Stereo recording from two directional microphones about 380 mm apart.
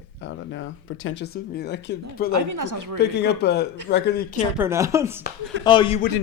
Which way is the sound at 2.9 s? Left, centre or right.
Left.